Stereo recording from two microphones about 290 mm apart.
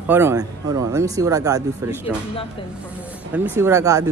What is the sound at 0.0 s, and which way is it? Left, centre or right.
Speech, centre.